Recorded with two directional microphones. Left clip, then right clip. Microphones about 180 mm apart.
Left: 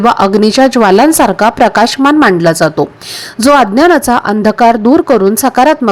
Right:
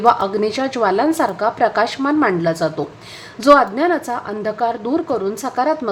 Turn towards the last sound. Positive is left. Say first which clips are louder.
# left 12 dB
turn(degrees=45)  # may be behind; listen again after turning